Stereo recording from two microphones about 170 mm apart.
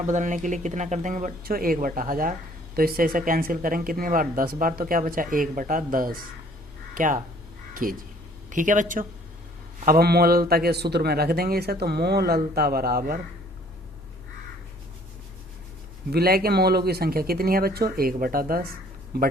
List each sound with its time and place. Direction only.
0.0 s speech: 45° right (ahead or behind)
9.8 s speech: 60° right (ahead or behind)
16.0 s speech: 65° right (ahead or behind)